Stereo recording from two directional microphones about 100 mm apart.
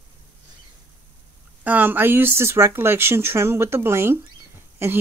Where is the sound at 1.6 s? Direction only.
20° right (ahead or behind).